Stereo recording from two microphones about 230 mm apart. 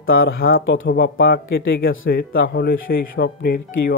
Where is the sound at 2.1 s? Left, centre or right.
Left.